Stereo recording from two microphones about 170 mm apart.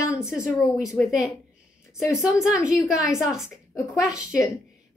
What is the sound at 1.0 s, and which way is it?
A woman's voice, centre (ahead or behind).